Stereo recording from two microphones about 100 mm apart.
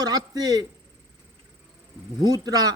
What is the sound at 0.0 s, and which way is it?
Speech, 40° right (ahead or behind).